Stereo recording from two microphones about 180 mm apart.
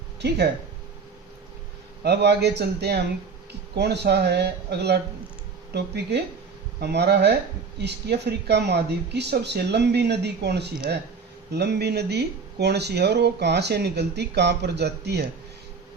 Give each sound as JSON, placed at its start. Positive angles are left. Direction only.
{"t": 0.2, "sound": "speech", "side_deg": -70}
{"t": 2.0, "sound": "speech", "side_deg": -70}